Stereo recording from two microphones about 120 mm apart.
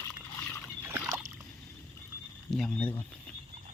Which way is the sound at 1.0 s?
25° right (ahead or behind).